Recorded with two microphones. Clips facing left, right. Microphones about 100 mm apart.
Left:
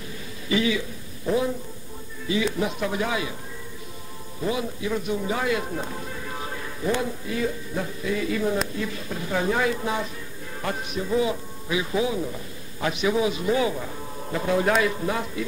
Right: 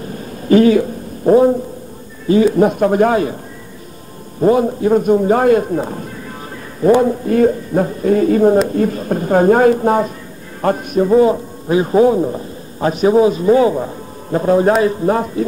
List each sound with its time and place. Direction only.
0.0 s a sound: 45° right (ahead or behind)
2.2 s speech: 45° right (ahead or behind)
4.4 s a man's voice: 50° right (ahead or behind)